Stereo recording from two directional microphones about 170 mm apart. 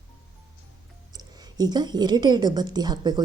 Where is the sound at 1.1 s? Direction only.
25° right (ahead or behind).